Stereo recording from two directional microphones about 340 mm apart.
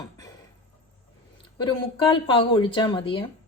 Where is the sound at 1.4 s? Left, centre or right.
Centre.